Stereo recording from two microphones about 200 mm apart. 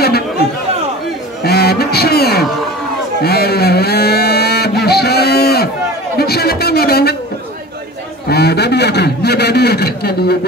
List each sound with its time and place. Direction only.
1.4 s music: 50° left (ahead or behind)
3.2 s a sound: 50° left (ahead or behind)
8.3 s a man's voice: 55° left (ahead or behind)